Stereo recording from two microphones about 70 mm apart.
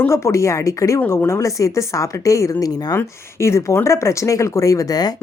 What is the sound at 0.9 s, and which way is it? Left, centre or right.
A woman's voice, left.